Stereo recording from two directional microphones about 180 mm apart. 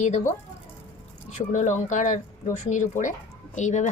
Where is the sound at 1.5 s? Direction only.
45° left (ahead or behind).